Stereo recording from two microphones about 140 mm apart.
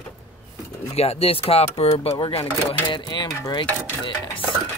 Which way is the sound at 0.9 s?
45° left (ahead or behind).